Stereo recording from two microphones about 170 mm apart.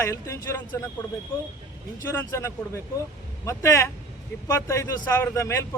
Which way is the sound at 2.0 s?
15° left (ahead or behind).